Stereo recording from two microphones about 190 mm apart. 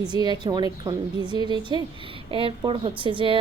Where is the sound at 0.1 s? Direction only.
20° right (ahead or behind).